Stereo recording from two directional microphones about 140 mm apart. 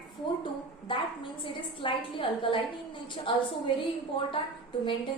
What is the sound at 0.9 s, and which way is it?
A woman's voice, 35° left (ahead or behind).